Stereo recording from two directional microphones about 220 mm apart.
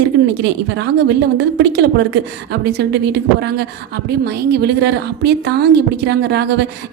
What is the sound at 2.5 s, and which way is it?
A woman's voice, 50° right (ahead or behind).